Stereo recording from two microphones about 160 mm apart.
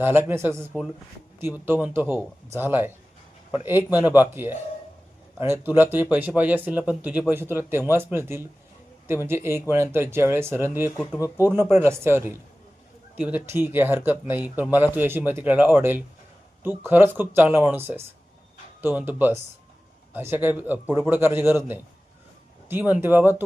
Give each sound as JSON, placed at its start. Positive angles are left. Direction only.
{"t": 0.0, "sound": "speech", "side_deg": -15}